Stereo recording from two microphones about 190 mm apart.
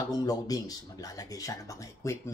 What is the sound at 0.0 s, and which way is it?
Speech, 20° left (ahead or behind).